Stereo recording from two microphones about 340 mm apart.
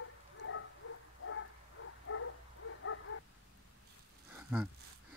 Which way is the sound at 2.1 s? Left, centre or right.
Left.